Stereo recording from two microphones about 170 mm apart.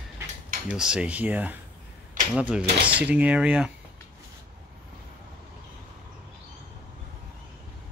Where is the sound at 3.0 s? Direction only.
10° right (ahead or behind).